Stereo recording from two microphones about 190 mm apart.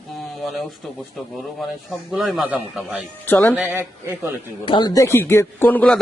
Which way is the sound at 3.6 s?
10° right (ahead or behind).